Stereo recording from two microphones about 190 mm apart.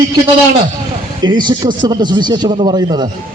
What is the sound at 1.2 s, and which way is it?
A man's voice, 25° right (ahead or behind).